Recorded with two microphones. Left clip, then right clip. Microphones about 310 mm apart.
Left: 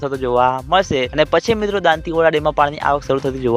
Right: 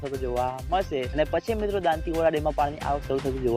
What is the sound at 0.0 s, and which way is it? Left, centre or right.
Speech, left.